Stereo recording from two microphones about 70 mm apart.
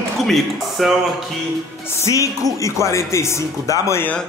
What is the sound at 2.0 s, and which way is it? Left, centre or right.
Speech, left.